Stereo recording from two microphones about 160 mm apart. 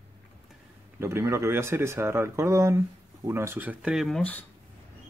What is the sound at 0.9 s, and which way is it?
Speech, 15° right (ahead or behind).